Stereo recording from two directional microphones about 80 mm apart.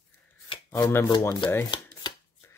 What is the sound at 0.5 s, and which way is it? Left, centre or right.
Shuffling cards, left.